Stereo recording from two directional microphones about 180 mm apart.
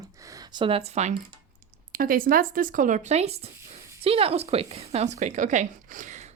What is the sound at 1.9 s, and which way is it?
Speech, 50° right (ahead or behind).